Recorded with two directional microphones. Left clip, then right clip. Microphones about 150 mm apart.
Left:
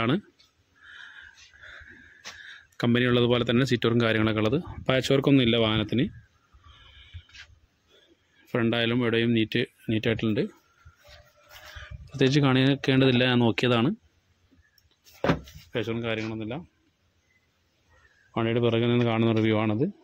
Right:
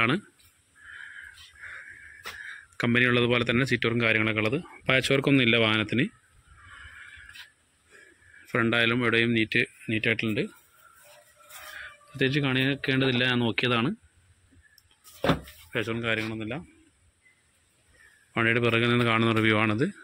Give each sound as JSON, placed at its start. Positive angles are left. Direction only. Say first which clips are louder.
{"t": 1.6, "sound": "wheeze", "louder": "right 5 dB", "side_deg": 25}
{"t": 2.4, "sound": "speech", "louder": "left 1 dB", "side_deg": 25}
{"t": 8.5, "sound": "speech", "louder": "right 2 dB", "side_deg": 20}
{"t": 12.2, "sound": "speech", "louder": "left 3 dB", "side_deg": 40}
{"t": 15.7, "sound": "speech", "louder": "right 1 dB", "side_deg": 15}
{"t": 18.3, "sound": "speech", "louder": "right 2 dB", "side_deg": 20}